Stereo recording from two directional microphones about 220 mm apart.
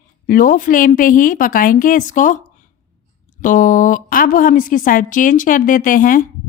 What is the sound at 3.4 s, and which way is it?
Speech, 35° left (ahead or behind).